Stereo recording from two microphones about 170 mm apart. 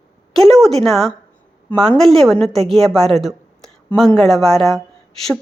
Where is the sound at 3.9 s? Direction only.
Centre (ahead or behind).